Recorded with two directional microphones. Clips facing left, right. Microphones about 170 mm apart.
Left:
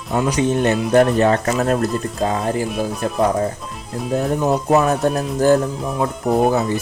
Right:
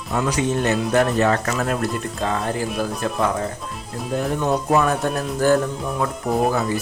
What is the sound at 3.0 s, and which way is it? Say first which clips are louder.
Speech: left 5 dB; 30° left (ahead or behind).